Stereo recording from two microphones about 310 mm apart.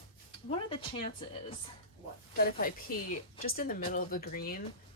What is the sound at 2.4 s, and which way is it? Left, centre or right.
Speech, left.